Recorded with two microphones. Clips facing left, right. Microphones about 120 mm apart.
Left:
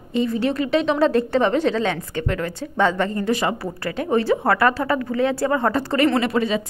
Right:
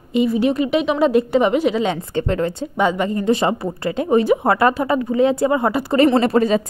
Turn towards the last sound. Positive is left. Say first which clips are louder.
# right 5 dB
turn(degrees=-40)  # may be behind; listen again after turning